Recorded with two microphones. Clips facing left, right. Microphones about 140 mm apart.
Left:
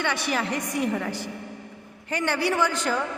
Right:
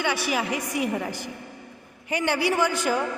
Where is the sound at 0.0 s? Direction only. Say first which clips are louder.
Right 1 dB; 10° right (ahead or behind).